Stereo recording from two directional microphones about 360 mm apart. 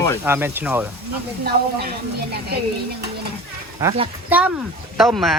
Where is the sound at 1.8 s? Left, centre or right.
Right.